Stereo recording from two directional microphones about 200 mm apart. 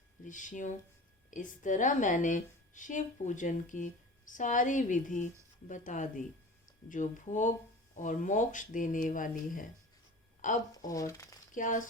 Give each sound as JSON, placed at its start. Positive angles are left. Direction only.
{"t": 0.3, "sound": "a woman's voice", "side_deg": 40}
{"t": 10.7, "sound": "speech", "side_deg": 15}
{"t": 11.5, "sound": "a woman's voice", "side_deg": 40}